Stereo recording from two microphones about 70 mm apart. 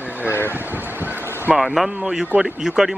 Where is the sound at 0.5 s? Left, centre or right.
Right.